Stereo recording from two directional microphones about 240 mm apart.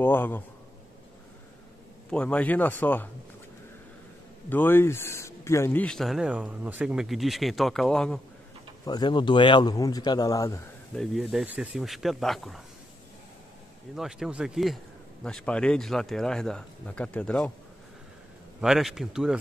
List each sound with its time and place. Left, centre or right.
0.0 s speech: centre
2.0 s speech: centre
4.5 s speech: centre
8.8 s speech: centre
11.0 s speech: centre
13.9 s speech: centre
18.6 s speech: centre